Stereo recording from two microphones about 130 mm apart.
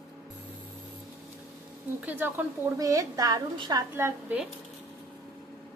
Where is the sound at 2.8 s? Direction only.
25° right (ahead or behind).